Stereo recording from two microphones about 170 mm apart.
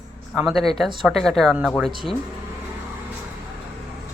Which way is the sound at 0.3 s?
Centre (ahead or behind).